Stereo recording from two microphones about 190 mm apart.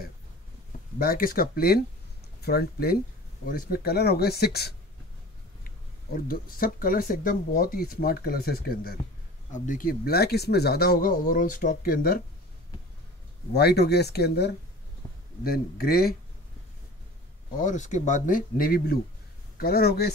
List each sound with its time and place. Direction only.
0.9 s speech: 50° left (ahead or behind)
6.1 s speech: 50° left (ahead or behind)
13.5 s speech: 60° left (ahead or behind)
17.6 s speech: 40° left (ahead or behind)